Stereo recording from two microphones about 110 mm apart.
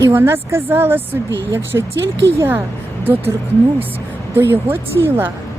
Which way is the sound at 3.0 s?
20° right (ahead or behind).